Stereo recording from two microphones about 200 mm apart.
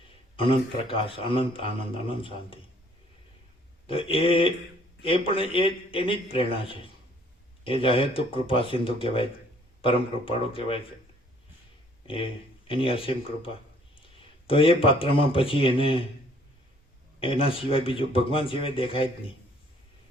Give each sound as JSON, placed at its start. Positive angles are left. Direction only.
{"t": 0.3, "sound": "a man's voice", "side_deg": 25}
{"t": 3.8, "sound": "a man's voice", "side_deg": 25}
{"t": 12.0, "sound": "a man's voice", "side_deg": 25}
{"t": 17.2, "sound": "a man's voice", "side_deg": 25}